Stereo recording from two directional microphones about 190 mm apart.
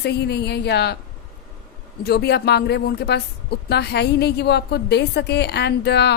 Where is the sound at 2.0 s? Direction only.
60° left (ahead or behind).